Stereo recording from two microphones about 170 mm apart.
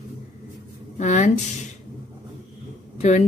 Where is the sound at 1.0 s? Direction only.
45° left (ahead or behind).